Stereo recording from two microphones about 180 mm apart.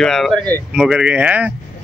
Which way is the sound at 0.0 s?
Centre (ahead or behind).